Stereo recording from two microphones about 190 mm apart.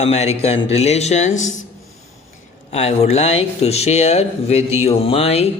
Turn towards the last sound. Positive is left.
turn(degrees=35)  # may be behind; listen again after turning